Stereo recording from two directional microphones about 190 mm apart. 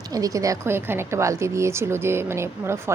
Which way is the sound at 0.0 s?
20° right (ahead or behind).